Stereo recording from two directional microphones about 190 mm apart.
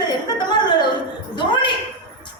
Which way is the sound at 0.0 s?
20° left (ahead or behind).